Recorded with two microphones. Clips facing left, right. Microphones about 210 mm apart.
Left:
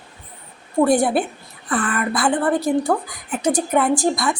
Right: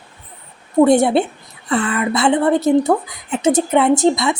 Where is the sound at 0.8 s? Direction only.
25° right (ahead or behind).